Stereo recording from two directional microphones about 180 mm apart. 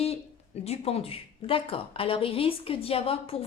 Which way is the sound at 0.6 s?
35° left (ahead or behind).